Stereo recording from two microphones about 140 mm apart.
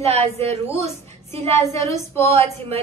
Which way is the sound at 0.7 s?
20° left (ahead or behind).